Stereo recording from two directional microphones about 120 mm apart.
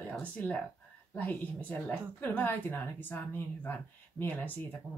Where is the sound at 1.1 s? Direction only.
15° left (ahead or behind).